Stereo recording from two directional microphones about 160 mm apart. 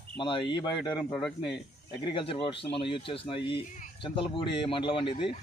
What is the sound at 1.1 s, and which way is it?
Speech, 5° left (ahead or behind).